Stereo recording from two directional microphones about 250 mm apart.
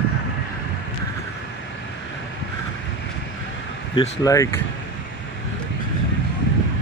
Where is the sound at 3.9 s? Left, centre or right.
Centre.